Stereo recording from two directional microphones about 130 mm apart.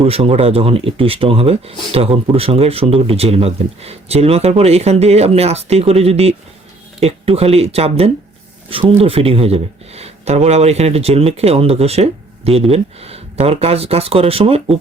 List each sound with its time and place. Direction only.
0.0 s speech: 50° right (ahead or behind)